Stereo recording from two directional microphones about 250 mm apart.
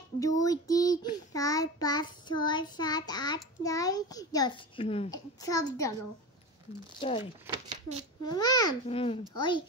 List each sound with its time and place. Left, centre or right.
0.2 s child singing: centre
7.0 s speech: centre
7.4 s speech: centre
8.2 s child singing: centre